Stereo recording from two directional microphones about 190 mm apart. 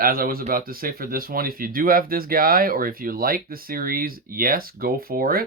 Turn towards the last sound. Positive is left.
turn(degrees=-50)  # may be behind; listen again after turning